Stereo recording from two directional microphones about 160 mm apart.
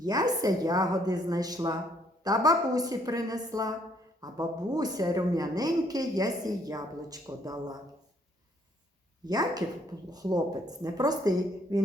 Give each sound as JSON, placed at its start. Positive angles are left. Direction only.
{"t": 0.0, "sound": "a woman's voice", "side_deg": -25}
{"t": 9.2, "sound": "a woman's voice", "side_deg": -25}